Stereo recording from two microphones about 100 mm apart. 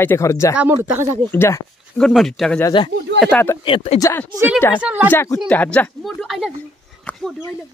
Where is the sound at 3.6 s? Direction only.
75° left (ahead or behind).